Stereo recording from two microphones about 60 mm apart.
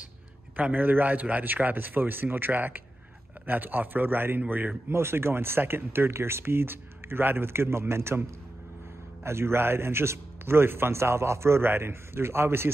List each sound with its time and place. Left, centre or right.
0.6 s a man's voice: right